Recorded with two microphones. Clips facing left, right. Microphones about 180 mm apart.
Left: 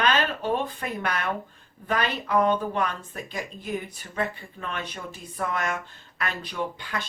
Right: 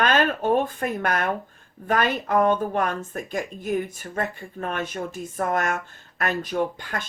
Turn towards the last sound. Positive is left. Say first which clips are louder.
# right 5 dB
turn(degrees=-50)  # may be behind; listen again after turning